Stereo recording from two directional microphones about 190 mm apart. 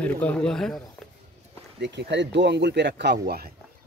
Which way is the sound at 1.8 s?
65° right (ahead or behind).